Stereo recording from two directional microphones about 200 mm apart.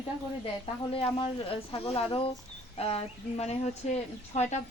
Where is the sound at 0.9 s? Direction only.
25° left (ahead or behind).